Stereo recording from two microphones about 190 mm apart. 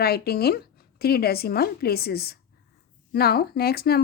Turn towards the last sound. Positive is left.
turn(degrees=55)  # may be behind; listen again after turning